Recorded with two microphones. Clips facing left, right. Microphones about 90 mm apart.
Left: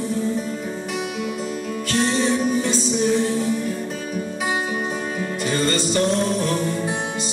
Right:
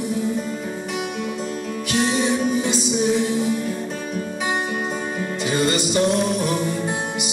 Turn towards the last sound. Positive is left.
turn(degrees=-15)  # may be behind; listen again after turning